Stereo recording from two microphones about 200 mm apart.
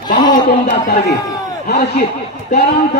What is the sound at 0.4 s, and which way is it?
Speech, 50° left (ahead or behind).